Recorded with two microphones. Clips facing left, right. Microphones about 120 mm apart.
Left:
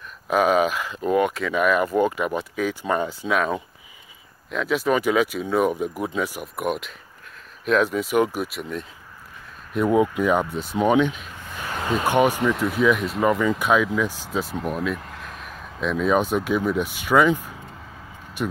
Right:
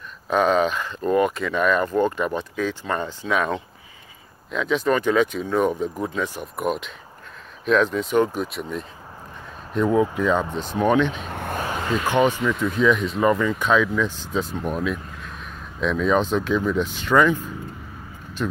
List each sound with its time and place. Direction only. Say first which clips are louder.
0.3 s speech: even; 5° left (ahead or behind)
10.5 s speech: right 1 dB; 45° right (ahead or behind)
10.8 s speech: even; 10° left (ahead or behind)
11.2 s a sound: right 9 dB; 60° right (ahead or behind)
12.1 s speech: left 1 dB; 10° left (ahead or behind)
14.4 s speech: left 1 dB; 90° left
14.7 s speech: right 1 dB; centre (ahead or behind)
15.0 s a sound: even; 90° left
15.8 s speech: even; 5° left (ahead or behind)